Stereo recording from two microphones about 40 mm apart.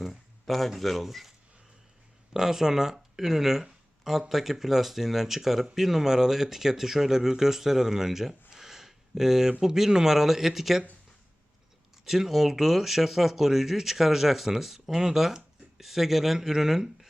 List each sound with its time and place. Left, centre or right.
0.0 s speech: centre
2.3 s speech: centre
12.0 s speech: centre